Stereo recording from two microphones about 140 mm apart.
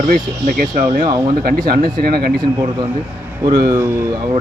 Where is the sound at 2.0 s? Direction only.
90° right.